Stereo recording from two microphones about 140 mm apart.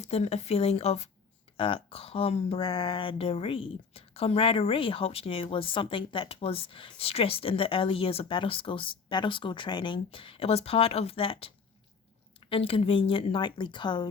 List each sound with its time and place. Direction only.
0.0 s a woman's voice: 50° left (ahead or behind); by 14.1 s 35° left (ahead or behind)